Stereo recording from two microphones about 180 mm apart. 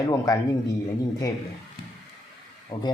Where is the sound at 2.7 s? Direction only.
25° left (ahead or behind).